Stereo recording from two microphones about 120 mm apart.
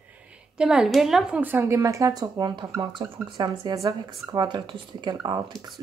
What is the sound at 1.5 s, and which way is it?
Speech, 25° right (ahead or behind).